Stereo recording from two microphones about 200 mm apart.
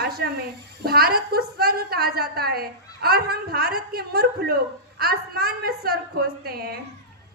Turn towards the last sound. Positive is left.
turn(degrees=-50)  # may be behind; listen again after turning